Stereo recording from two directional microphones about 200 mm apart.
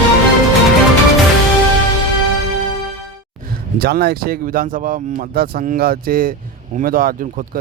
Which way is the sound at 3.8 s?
50° right (ahead or behind).